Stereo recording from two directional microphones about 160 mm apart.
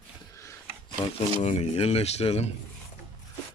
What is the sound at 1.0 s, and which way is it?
Speech, 35° left (ahead or behind).